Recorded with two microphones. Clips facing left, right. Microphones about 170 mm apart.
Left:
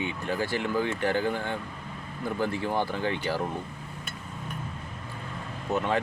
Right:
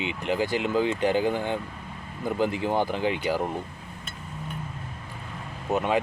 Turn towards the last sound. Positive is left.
turn(degrees=-15)  # may be behind; listen again after turning